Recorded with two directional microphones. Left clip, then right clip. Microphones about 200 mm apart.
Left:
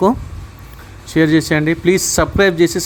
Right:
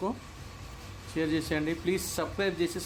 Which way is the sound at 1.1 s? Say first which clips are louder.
Left 17 dB; 40° left (ahead or behind).